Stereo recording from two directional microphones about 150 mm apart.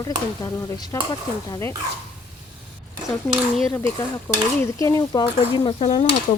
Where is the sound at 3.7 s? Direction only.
15° left (ahead or behind); by 6.0 s 30° left (ahead or behind).